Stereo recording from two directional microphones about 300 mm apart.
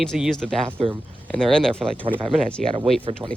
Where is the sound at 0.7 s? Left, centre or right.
Centre.